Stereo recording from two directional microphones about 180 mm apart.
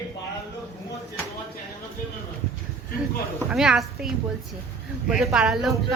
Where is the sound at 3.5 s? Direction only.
5° right (ahead or behind).